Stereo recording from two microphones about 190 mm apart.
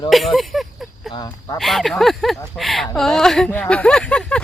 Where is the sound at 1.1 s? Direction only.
20° left (ahead or behind).